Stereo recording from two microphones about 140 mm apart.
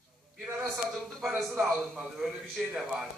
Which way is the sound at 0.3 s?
Centre (ahead or behind).